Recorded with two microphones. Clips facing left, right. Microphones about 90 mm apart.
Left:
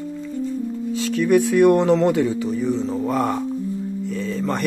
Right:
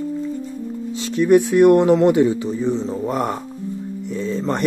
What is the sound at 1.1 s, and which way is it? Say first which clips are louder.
Speech: right 3 dB; 20° right (ahead or behind).